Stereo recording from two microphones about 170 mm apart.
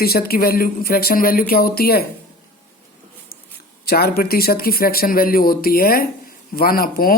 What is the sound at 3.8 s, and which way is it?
Speech, 65° left (ahead or behind).